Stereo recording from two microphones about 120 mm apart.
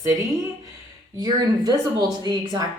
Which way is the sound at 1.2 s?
35° right (ahead or behind).